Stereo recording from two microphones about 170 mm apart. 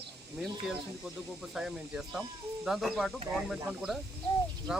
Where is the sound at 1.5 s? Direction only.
5° right (ahead or behind).